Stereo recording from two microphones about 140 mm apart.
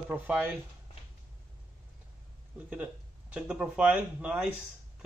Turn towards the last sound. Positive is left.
turn(degrees=-10)  # may be behind; listen again after turning